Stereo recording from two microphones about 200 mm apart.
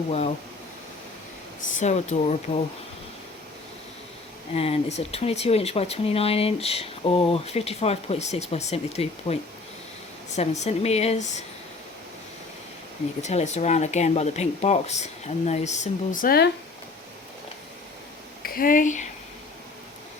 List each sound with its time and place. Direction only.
1.6 s speech: 40° left (ahead or behind)
4.5 s speech: 30° left (ahead or behind)
13.2 s speech: 35° left (ahead or behind)
18.4 s speech: 45° left (ahead or behind)